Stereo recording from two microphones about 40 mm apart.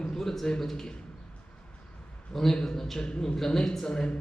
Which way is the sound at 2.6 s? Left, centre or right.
Centre.